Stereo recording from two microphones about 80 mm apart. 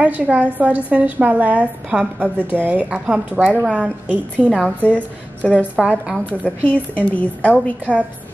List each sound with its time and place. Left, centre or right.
0.0 s a woman's voice: centre
4.8 s a woman's voice: centre
5.8 s a woman's voice: centre
6.4 s a woman's voice: centre